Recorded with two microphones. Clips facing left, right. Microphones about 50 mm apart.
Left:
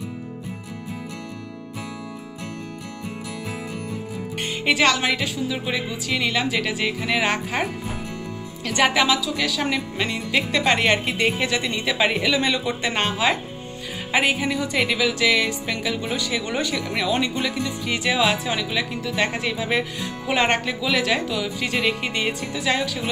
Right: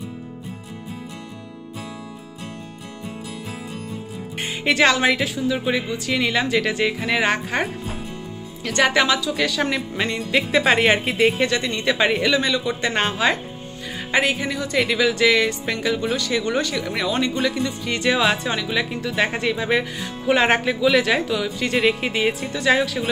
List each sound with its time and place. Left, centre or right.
4.4 s speech: centre
8.7 s speech: centre
10.5 s speech: centre
12.4 s a man's voice: centre
12.8 s speech: centre